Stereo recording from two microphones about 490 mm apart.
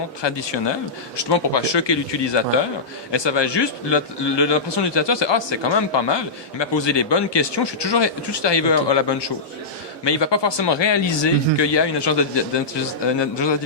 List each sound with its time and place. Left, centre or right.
0.2 s a man's voice: left